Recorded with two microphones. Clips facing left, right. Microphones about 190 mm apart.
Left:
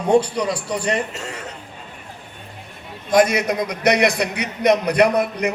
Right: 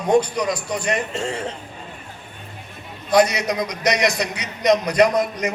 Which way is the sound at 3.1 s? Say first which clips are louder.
Left 1 dB; 50° left (ahead or behind).